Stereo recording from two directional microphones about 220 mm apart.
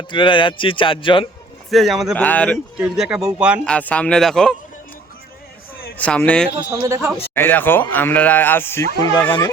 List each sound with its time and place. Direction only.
0.1 s a man's voice: 20° left (ahead or behind)
1.7 s speech: centre (ahead or behind)
6.0 s speech: 5° left (ahead or behind)
6.7 s speech: 10° right (ahead or behind)
7.3 s speech: 10° left (ahead or behind)